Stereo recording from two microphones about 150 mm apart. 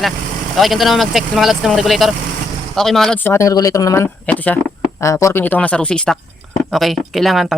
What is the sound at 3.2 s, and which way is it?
Speech, 20° left (ahead or behind).